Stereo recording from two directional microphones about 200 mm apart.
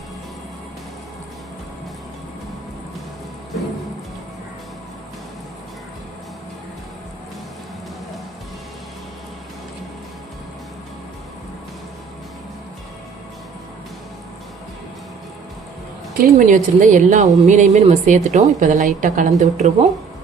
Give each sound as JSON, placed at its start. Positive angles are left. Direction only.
{"t": 16.1, "sound": "a woman's voice", "side_deg": -40}